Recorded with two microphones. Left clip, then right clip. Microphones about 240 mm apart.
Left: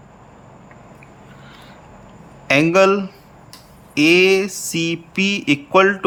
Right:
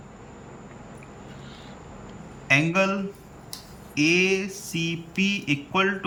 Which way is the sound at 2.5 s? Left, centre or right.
Left.